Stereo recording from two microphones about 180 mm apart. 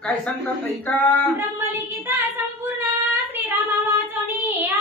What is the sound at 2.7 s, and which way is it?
Child singing, 10° right (ahead or behind).